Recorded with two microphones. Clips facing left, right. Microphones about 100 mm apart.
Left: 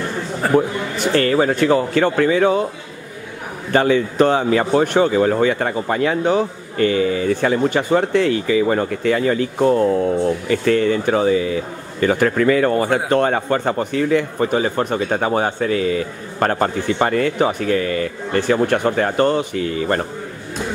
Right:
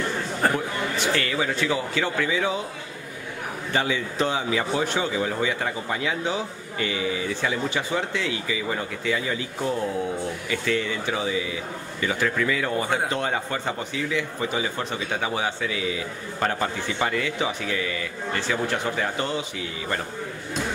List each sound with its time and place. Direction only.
0.6 s speech: 45° left (ahead or behind)
3.7 s speech: 55° left (ahead or behind)